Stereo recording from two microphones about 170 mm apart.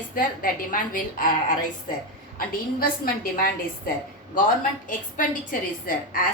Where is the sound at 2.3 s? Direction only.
60° left (ahead or behind).